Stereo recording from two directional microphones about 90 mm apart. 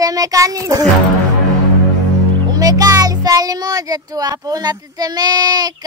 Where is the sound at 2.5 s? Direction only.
45° right (ahead or behind).